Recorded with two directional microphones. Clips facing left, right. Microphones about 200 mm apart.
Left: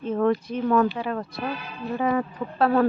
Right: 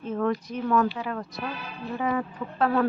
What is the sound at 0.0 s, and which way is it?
Speech, 30° left (ahead or behind).